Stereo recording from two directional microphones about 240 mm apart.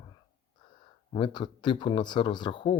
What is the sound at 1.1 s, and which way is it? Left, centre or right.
Speech, centre.